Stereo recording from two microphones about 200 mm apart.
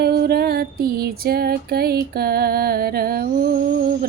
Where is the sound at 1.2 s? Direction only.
50° right (ahead or behind).